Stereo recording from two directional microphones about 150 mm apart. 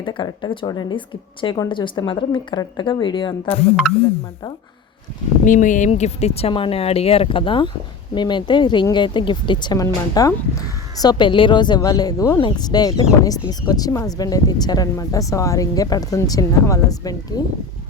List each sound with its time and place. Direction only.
0.0 s a woman's voice: 30° left (ahead or behind)
5.5 s a woman's voice: 55° left (ahead or behind); by 17.4 s 25° left (ahead or behind)